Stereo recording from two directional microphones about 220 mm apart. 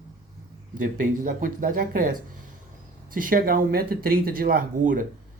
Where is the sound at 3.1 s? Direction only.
40° right (ahead or behind).